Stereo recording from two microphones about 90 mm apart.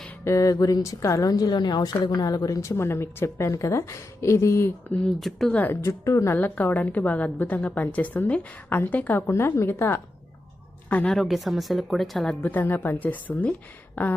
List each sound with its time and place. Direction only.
0.3 s a woman's voice: 40° left (ahead or behind)
5.0 s speech: centre (ahead or behind)
5.5 s a woman's voice: 15° left (ahead or behind)
5.8 s a woman's voice: 35° left (ahead or behind)
6.3 s a woman's voice: 20° left (ahead or behind)
9.2 s a woman's voice: 30° left (ahead or behind)
11.1 s speech: centre (ahead or behind)
12.4 s a woman's voice: 20° left (ahead or behind)
13.9 s a sound: 20° left (ahead or behind)